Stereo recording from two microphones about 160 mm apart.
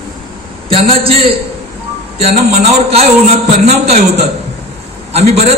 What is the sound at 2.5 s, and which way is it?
A man's voice, 40° right (ahead or behind).